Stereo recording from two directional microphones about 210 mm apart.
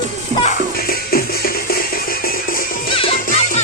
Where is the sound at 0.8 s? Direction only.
45° left (ahead or behind).